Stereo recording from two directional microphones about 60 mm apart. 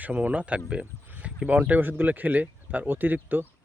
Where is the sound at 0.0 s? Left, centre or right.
Right.